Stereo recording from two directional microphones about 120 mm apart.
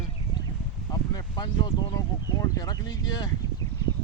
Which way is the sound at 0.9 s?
35° left (ahead or behind).